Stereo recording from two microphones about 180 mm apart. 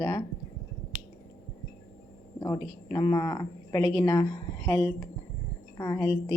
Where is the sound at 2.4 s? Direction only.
20° left (ahead or behind).